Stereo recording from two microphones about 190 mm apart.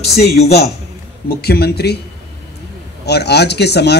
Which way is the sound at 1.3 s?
55° left (ahead or behind).